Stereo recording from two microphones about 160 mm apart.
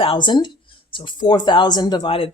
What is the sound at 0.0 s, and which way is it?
Speech, 30° left (ahead or behind).